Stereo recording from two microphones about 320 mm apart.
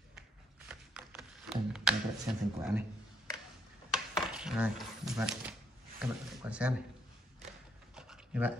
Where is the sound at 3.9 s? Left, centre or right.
Centre.